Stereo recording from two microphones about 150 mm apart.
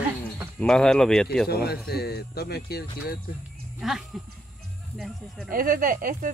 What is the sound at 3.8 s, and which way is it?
Speech, centre (ahead or behind).